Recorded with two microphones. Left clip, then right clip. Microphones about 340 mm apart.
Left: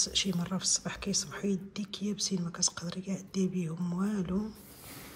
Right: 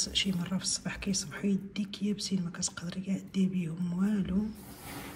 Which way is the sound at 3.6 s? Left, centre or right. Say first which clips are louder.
Even; left.